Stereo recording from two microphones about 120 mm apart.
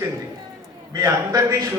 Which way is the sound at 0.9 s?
25° right (ahead or behind).